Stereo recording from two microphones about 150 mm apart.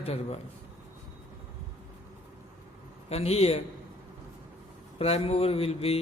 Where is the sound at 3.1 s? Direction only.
45° left (ahead or behind).